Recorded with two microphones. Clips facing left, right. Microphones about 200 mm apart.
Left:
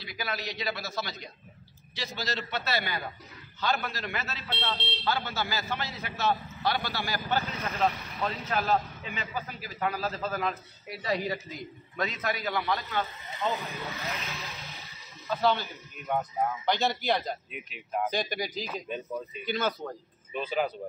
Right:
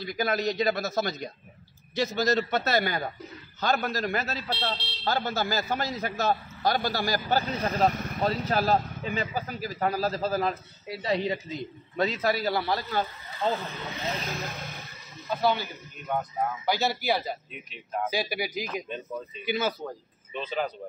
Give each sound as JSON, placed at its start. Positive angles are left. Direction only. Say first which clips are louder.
{"t": 0.0, "sound": "a man's voice", "louder": "right 9 dB", "side_deg": -50}
{"t": 4.5, "sound": "speech", "louder": "right 2 dB", "side_deg": 25}
{"t": 5.0, "sound": "a man's voice", "louder": "right 4 dB", "side_deg": -40}
{"t": 14.2, "sound": "speech", "louder": "right 6 dB", "side_deg": -50}
{"t": 15.2, "sound": "speech", "louder": "right 1 dB", "side_deg": -10}
{"t": 17.5, "sound": "speech", "louder": "left 1 dB", "side_deg": 5}
{"t": 18.1, "sound": "speech", "louder": "right 2 dB", "side_deg": -5}
{"t": 18.9, "sound": "speech", "louder": "left 1 dB", "side_deg": 5}
{"t": 19.4, "sound": "speech", "louder": "right 3 dB", "side_deg": -5}
{"t": 20.3, "sound": "speech", "louder": "left 1 dB", "side_deg": 5}